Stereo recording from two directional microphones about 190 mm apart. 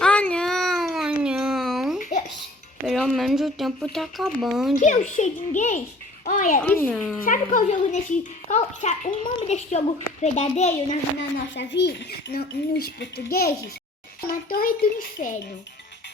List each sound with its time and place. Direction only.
0.0 s a sound: 5° left (ahead or behind)
2.0 s babbling: 45° left (ahead or behind)
2.8 s speech: centre (ahead or behind)
4.8 s a child's voice: 40° left (ahead or behind)
6.7 s speech: 10° left (ahead or behind)
7.3 s a child's voice: 45° left (ahead or behind)
11.5 s a child's voice: 65° left (ahead or behind); by 15.3 s 50° left (ahead or behind)